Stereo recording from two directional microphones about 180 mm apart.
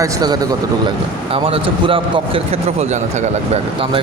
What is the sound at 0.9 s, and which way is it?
Speech, 30° right (ahead or behind).